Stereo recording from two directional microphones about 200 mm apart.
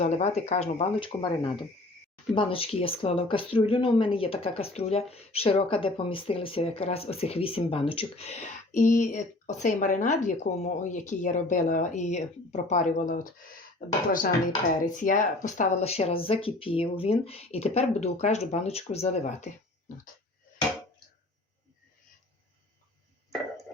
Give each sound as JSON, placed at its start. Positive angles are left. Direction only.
{"t": 0.0, "sound": "speech", "side_deg": 35}